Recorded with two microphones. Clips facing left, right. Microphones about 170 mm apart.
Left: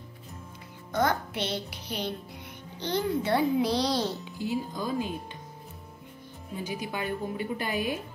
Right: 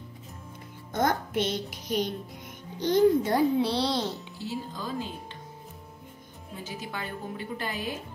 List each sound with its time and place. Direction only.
0.9 s speech: 45° right (ahead or behind)
3.5 s a child's voice: 30° right (ahead or behind)
4.4 s a woman's voice: 15° left (ahead or behind)
6.6 s a woman's voice: 15° left (ahead or behind)